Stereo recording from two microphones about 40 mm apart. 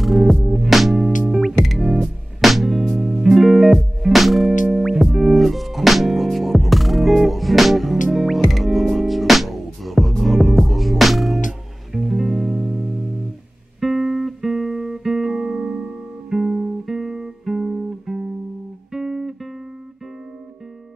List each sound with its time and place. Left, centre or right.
0.0 s music: centre; by 15.9 s right
16.3 s music: centre